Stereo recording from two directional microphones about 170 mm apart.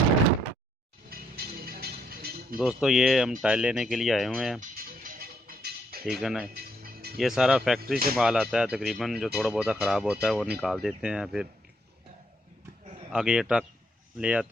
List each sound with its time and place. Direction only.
1.1 s music: 60° right (ahead or behind)
2.6 s speech: 5° right (ahead or behind)
4.6 s music: 55° right (ahead or behind)
6.1 s speech: centre (ahead or behind)
6.5 s music: 65° right (ahead or behind)
7.2 s speech: centre (ahead or behind)
13.1 s speech: 5° right (ahead or behind)